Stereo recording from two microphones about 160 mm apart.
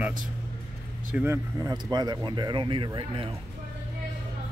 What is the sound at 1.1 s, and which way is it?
Speech, 15° right (ahead or behind).